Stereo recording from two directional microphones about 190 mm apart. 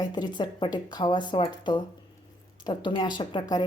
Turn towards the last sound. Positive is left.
turn(degrees=25)  # may be behind; listen again after turning